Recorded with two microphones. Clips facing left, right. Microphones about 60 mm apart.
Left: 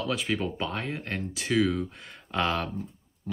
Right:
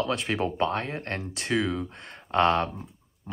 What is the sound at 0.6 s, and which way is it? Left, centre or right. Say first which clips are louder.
Speech: right 5 dB; right.